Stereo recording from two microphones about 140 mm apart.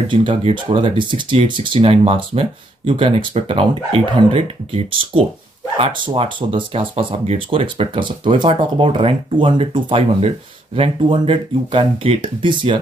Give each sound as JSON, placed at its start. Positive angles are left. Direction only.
{"t": 0.1, "sound": "speech", "side_deg": -35}